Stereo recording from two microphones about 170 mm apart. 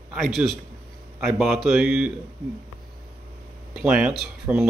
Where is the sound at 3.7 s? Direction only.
5° right (ahead or behind).